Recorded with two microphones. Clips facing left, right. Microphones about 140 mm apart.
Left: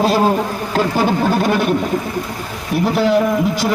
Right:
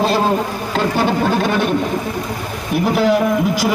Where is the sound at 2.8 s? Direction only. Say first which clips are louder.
Even; centre (ahead or behind).